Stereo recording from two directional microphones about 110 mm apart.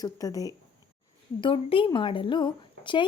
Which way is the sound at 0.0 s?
35° left (ahead or behind).